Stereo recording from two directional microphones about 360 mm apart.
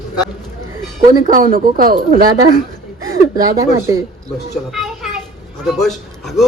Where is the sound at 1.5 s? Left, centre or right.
Right.